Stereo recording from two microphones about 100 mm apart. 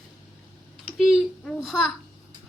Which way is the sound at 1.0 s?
Centre (ahead or behind).